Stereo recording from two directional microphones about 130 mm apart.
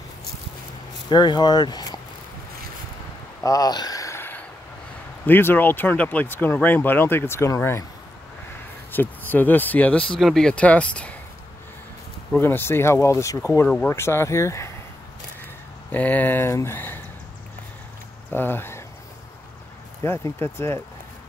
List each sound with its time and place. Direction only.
1.1 s speech: 35° left (ahead or behind)
3.4 s a sound: 30° left (ahead or behind)
5.2 s speech: 15° left (ahead or behind)
8.9 s speech: 15° left (ahead or behind)
12.4 s speech: 15° left (ahead or behind)
15.9 s speech: 15° left (ahead or behind)
18.3 s speech: 15° left (ahead or behind)
20.0 s speech: 20° left (ahead or behind)